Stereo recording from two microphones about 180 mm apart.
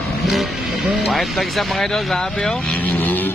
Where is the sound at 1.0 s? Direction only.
Centre (ahead or behind).